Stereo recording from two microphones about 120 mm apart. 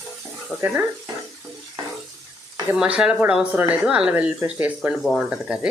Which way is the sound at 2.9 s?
10° right (ahead or behind).